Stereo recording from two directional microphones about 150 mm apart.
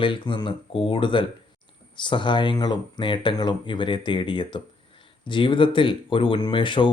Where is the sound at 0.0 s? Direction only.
35° left (ahead or behind).